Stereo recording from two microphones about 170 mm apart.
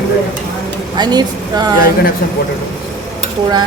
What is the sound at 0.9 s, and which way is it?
Speech, 25° right (ahead or behind).